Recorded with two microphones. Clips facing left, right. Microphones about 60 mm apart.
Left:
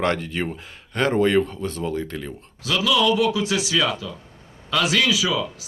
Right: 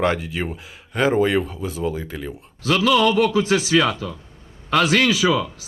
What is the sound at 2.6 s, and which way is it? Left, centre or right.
A man's voice, right.